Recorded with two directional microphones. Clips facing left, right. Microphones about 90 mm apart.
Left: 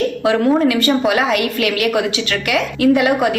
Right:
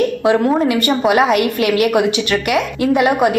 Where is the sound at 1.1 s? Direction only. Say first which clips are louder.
Right 3 dB; 30° right (ahead or behind).